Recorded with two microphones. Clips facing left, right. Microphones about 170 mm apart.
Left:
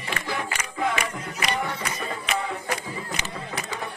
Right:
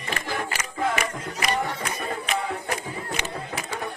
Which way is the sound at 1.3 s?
40° right (ahead or behind).